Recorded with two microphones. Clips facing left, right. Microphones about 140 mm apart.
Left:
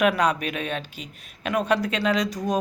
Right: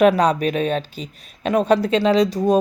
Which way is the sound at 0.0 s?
30° right (ahead or behind).